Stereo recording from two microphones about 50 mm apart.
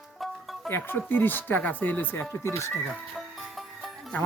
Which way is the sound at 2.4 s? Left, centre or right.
Left.